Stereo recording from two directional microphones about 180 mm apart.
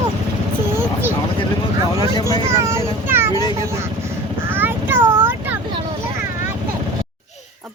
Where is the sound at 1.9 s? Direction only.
20° left (ahead or behind).